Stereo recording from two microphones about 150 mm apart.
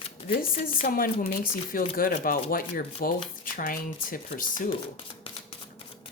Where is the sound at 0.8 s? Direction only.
70° left (ahead or behind).